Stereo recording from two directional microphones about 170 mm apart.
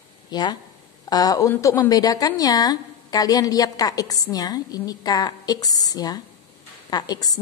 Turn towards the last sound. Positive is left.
turn(degrees=20)  # may be behind; listen again after turning